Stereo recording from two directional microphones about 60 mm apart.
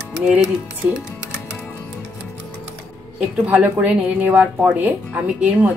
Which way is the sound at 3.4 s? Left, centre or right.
Right.